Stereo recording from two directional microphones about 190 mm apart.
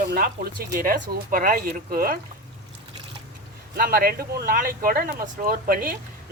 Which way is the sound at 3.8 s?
50° right (ahead or behind).